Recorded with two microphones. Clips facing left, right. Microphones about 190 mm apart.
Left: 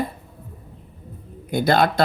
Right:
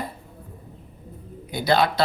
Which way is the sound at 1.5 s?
50° left (ahead or behind).